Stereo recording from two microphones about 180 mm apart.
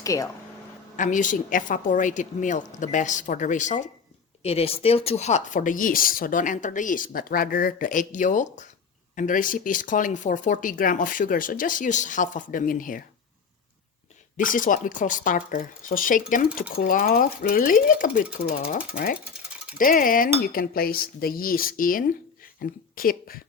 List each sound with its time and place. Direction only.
0.0 s speech: 20° left (ahead or behind)
0.9 s speech: 45° left (ahead or behind)
14.3 s speech: 50° left (ahead or behind)